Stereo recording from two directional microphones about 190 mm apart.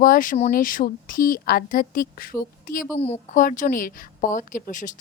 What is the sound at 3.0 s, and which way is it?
Speech, 40° left (ahead or behind).